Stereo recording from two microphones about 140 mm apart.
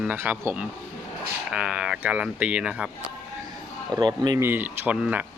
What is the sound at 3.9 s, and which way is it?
Speech, 30° right (ahead or behind).